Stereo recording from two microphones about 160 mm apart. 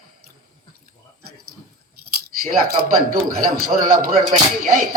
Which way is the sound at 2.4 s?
60° right (ahead or behind).